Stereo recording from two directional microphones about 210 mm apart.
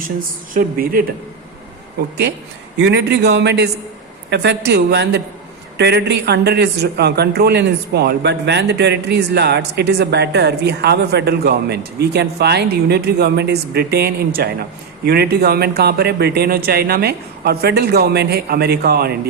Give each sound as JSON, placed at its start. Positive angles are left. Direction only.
{"t": 0.5, "sound": "speech", "side_deg": -45}
{"t": 2.8, "sound": "speech", "side_deg": -55}